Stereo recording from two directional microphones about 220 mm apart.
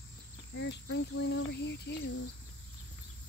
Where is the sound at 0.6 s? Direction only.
55° left (ahead or behind).